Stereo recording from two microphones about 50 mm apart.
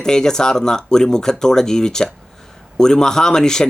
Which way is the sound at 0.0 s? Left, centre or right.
Centre.